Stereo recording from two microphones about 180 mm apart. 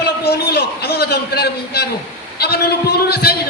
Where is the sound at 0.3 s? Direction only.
60° left (ahead or behind).